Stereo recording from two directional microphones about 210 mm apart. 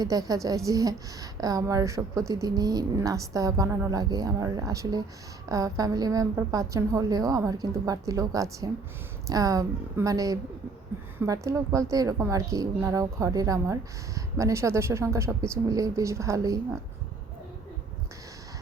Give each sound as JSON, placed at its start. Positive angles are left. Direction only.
{"t": 0.0, "sound": "a woman's voice", "side_deg": -15}